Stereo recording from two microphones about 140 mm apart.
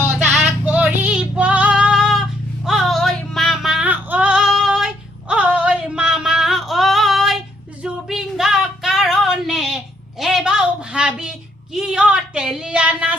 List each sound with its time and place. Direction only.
0.3 s child singing: centre (ahead or behind)
2.6 s female singing: centre (ahead or behind)
5.3 s a sound: 10° right (ahead or behind)